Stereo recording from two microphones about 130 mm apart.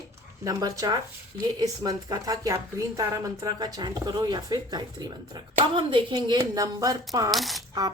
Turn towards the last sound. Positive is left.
turn(degrees=0)  # may be behind; listen again after turning